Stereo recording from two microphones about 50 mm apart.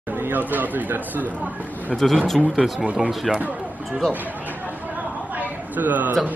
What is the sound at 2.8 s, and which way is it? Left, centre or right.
Speech, right.